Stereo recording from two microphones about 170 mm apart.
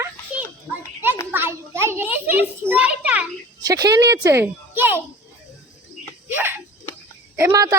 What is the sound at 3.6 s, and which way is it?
A child's voice, 25° right (ahead or behind).